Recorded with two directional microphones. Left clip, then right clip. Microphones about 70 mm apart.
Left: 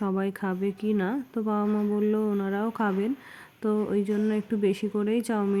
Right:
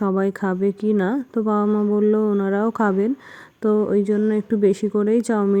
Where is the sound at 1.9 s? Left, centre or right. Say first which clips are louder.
Right 9 dB; right.